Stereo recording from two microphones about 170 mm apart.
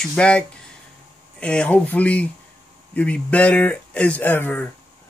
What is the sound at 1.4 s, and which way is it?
Speech, 5° left (ahead or behind).